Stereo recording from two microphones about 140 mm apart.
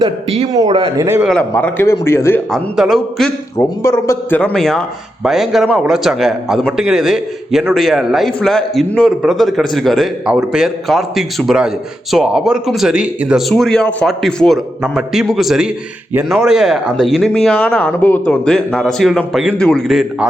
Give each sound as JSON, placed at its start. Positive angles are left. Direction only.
{"t": 0.0, "sound": "a man's voice", "side_deg": -45}
{"t": 0.9, "sound": "a man's voice", "side_deg": -15}
{"t": 1.3, "sound": "a man's voice", "side_deg": 10}
{"t": 2.5, "sound": "a man's voice", "side_deg": -5}
{"t": 3.6, "sound": "speech", "side_deg": 20}
{"t": 4.4, "sound": "a man's voice", "side_deg": 5}